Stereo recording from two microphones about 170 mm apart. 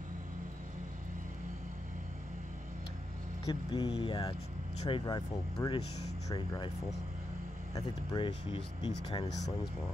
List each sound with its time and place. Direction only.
3.4 s speech: 30° left (ahead or behind)
7.7 s speech: 25° left (ahead or behind)